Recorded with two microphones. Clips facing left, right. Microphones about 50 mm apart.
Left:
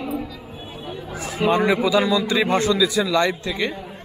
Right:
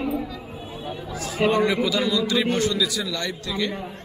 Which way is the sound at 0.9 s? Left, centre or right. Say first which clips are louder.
Left 3 dB; left.